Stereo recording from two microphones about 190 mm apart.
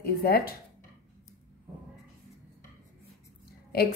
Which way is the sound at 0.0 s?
55° left (ahead or behind).